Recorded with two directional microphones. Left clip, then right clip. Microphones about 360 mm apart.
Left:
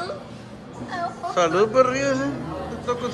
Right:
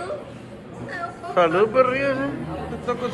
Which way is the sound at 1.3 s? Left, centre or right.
Centre.